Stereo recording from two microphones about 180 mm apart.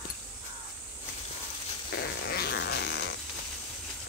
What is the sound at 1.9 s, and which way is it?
Fart, 65° left (ahead or behind).